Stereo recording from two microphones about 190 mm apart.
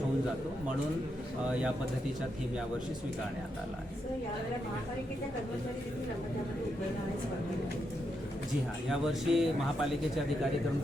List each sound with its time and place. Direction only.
8.9 s speech: centre (ahead or behind)